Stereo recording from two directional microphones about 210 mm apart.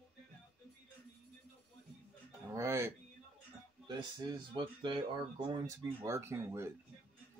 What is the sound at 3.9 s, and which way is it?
Speech, 20° right (ahead or behind).